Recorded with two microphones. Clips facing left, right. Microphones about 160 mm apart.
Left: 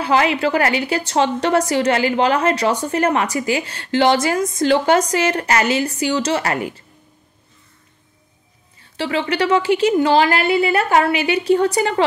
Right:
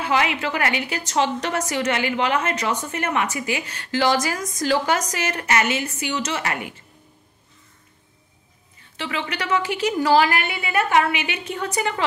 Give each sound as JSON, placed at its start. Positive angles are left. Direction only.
{"t": 0.0, "sound": "a woman's voice", "side_deg": 35}
{"t": 8.9, "sound": "a woman's voice", "side_deg": 30}